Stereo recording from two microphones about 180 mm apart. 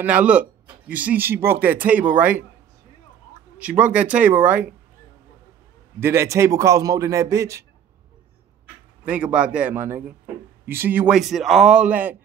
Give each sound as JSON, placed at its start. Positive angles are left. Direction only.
{"t": 0.0, "sound": "speech", "side_deg": -5}
{"t": 3.5, "sound": "speech", "side_deg": -5}
{"t": 5.9, "sound": "speech", "side_deg": -15}
{"t": 9.0, "sound": "a man's voice", "side_deg": -5}